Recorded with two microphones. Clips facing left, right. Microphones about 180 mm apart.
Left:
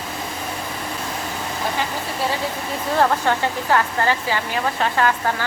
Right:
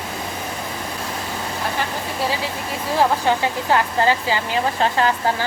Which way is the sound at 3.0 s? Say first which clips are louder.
Right 1 dB; 15° right (ahead or behind).